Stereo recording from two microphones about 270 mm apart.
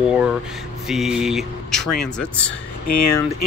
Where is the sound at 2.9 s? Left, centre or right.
Left.